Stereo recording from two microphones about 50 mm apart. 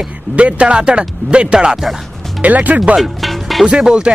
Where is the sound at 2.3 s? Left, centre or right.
Right.